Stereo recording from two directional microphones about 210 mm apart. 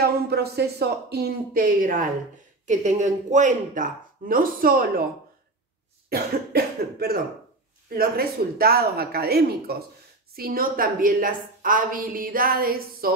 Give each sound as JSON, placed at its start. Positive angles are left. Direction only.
{"t": 0.0, "sound": "a woman's voice", "side_deg": -50}
{"t": 6.0, "sound": "cough", "side_deg": -45}
{"t": 7.9, "sound": "a woman's voice", "side_deg": -45}